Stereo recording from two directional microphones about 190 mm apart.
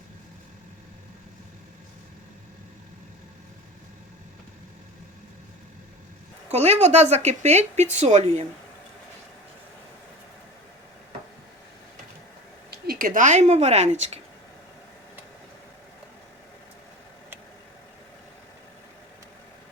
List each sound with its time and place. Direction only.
6.5 s speech: 35° right (ahead or behind)
12.7 s speech: 50° right (ahead or behind)